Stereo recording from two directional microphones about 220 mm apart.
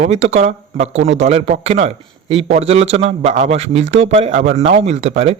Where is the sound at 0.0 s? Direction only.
30° right (ahead or behind).